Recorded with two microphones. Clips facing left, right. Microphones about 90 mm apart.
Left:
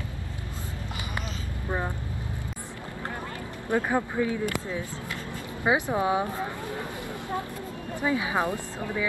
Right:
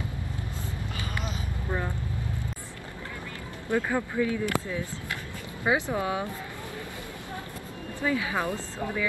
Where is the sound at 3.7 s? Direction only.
20° left (ahead or behind).